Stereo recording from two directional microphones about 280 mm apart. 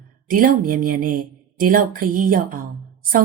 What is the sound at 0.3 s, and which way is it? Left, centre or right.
A woman's voice, right.